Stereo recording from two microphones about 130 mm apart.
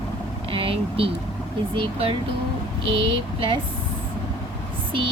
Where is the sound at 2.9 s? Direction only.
40° right (ahead or behind).